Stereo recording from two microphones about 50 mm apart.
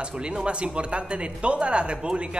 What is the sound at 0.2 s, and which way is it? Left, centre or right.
Speech, right.